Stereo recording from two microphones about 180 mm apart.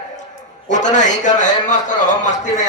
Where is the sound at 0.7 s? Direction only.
45° left (ahead or behind).